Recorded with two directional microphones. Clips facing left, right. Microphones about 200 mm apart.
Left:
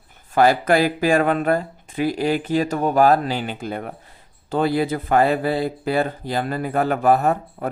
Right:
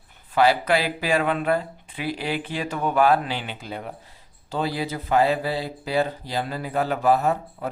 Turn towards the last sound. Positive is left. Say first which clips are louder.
# left 3 dB
turn(degrees=50)  # may be behind; listen again after turning